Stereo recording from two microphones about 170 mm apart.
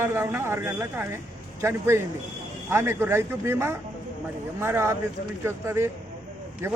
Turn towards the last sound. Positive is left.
turn(degrees=-15)  # may be behind; listen again after turning